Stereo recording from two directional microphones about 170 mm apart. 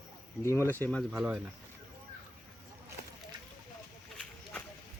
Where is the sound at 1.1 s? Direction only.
5° right (ahead or behind).